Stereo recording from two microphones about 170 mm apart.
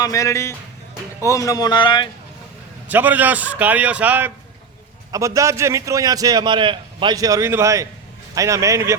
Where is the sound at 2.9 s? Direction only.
10° right (ahead or behind).